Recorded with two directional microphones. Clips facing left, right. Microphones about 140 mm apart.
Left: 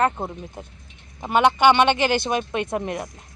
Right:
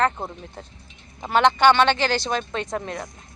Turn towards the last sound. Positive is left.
turn(degrees=15)  # may be behind; listen again after turning